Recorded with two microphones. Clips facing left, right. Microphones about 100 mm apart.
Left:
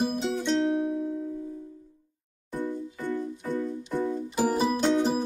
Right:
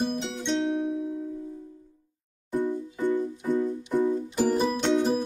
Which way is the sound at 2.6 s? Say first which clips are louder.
Right 4 dB; 15° right (ahead or behind).